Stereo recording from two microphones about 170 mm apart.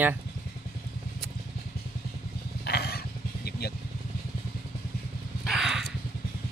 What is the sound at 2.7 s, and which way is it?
Vehicle, 70° left (ahead or behind).